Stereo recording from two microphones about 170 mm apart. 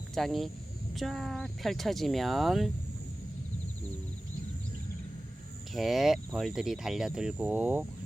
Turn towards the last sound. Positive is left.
turn(degrees=-10)  # may be behind; listen again after turning